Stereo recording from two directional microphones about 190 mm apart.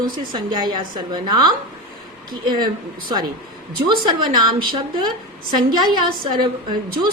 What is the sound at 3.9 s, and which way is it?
Speech, 25° right (ahead or behind).